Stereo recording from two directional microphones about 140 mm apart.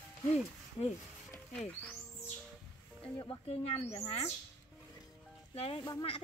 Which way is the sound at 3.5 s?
45° left (ahead or behind).